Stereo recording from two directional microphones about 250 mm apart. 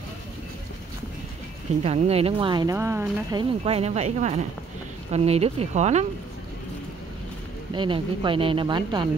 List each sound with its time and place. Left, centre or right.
1.8 s speech: right
7.7 s speech: centre